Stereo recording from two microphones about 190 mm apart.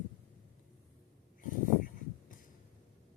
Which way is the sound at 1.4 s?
45° left (ahead or behind).